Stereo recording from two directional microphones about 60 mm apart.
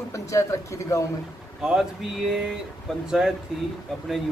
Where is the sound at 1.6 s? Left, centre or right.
Centre.